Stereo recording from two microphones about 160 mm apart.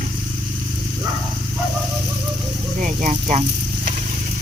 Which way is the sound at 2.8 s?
50° right (ahead or behind).